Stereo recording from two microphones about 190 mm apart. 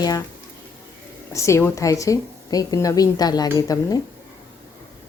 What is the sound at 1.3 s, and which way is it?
A woman's voice, 15° left (ahead or behind).